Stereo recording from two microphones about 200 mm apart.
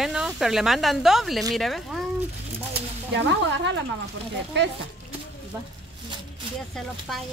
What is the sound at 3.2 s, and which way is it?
Speech, 60° right (ahead or behind).